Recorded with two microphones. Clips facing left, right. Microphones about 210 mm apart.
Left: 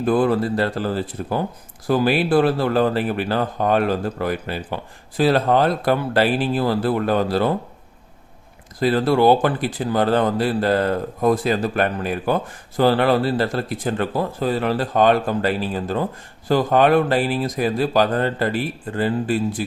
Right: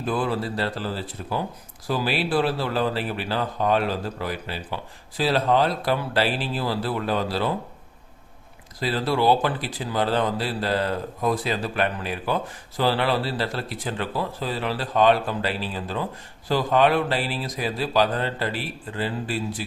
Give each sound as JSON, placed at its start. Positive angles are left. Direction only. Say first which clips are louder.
{"t": 0.0, "sound": "speech", "louder": "left 7 dB", "side_deg": 50}
{"t": 8.8, "sound": "speech", "louder": "left 7 dB", "side_deg": 50}